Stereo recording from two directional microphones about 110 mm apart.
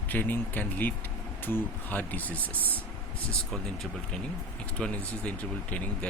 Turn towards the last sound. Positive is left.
turn(degrees=15)  # may be behind; listen again after turning